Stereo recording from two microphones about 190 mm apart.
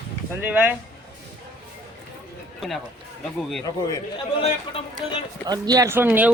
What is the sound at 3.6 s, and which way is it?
Speech, 20° left (ahead or behind).